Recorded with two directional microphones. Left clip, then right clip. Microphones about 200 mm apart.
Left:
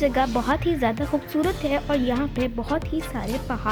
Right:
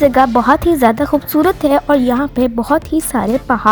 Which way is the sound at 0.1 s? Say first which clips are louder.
Right 12 dB; 35° right (ahead or behind).